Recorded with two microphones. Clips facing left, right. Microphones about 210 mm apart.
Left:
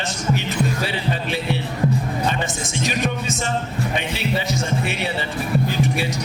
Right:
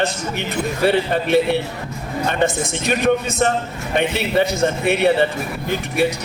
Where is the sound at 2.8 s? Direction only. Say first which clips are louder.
Right 6 dB; 55° right (ahead or behind).